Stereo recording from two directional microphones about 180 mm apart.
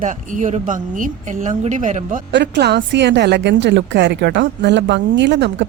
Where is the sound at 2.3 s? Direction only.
75° right (ahead or behind).